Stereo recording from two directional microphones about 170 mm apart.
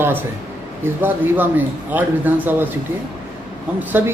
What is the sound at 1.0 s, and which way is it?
A man's voice, 10° right (ahead or behind).